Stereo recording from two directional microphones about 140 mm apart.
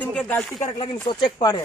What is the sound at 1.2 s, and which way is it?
Speech, 30° left (ahead or behind).